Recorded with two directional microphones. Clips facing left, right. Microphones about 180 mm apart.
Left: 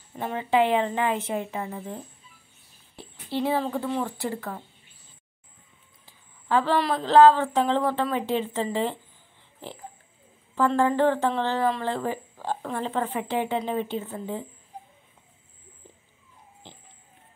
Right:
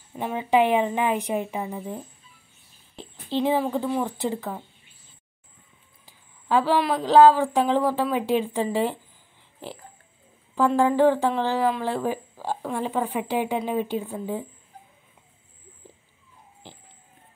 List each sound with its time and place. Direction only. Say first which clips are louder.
0.2 s speech: right 2 dB; 15° right (ahead or behind)
3.4 s speech: right 3 dB; 15° right (ahead or behind)
6.0 s speech: right 2 dB; 10° right (ahead or behind)
10.5 s speech: right 2 dB; 15° right (ahead or behind)